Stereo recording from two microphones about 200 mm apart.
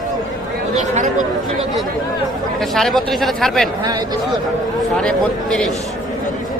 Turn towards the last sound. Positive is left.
turn(degrees=5)  # may be behind; listen again after turning